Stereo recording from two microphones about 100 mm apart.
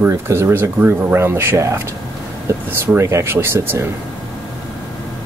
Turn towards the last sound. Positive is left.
turn(degrees=-25)  # may be behind; listen again after turning